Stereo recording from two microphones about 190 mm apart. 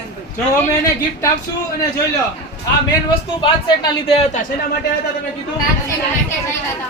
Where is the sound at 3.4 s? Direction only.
25° left (ahead or behind).